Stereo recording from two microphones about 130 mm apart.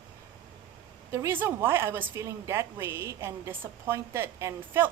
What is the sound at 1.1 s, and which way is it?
A woman's voice, 20° right (ahead or behind).